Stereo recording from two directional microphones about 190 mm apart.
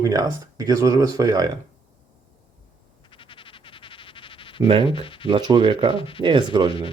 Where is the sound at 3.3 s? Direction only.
25° left (ahead or behind).